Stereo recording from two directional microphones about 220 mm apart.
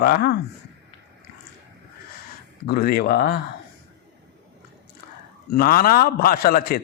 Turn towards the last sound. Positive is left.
turn(degrees=40)  # may be behind; listen again after turning